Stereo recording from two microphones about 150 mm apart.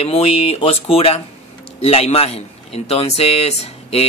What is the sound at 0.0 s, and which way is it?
A man's voice, 40° left (ahead or behind).